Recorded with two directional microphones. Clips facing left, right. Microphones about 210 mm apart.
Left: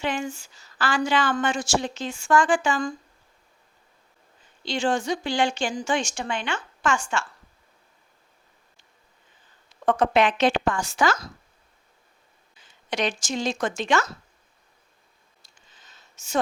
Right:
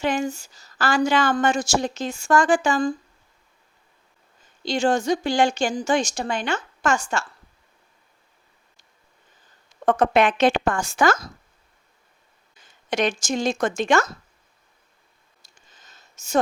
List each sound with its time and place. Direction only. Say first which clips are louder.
0.0 s a woman's voice: right 4 dB; 40° right (ahead or behind)
4.6 s a woman's voice: right 4 dB; 40° right (ahead or behind)
9.6 s a woman's voice: right 2 dB; 45° right (ahead or behind)
12.5 s speech: right 4 dB; 45° right (ahead or behind)
15.7 s a sound: right 2 dB; 45° right (ahead or behind)